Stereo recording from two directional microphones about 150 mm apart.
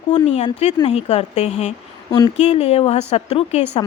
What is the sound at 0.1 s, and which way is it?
A woman's voice, 50° left (ahead or behind).